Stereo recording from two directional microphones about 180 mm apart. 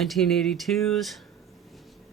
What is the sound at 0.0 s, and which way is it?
Speech, centre (ahead or behind).